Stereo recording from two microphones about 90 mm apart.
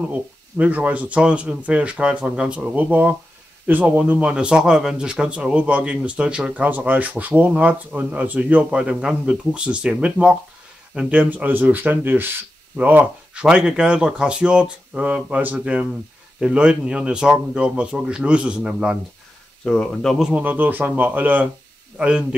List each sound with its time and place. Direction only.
0.6 s speech: 15° right (ahead or behind)
19.6 s speech: 10° left (ahead or behind)
20.2 s speech: 15° right (ahead or behind)